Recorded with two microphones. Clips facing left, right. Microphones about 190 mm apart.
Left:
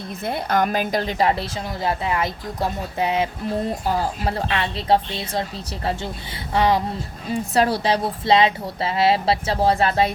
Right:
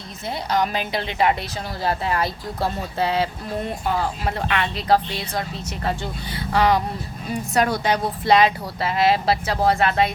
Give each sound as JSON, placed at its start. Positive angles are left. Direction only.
{"t": 0.3, "sound": "a woman's voice", "side_deg": 50}
{"t": 3.6, "sound": "a woman's voice", "side_deg": 35}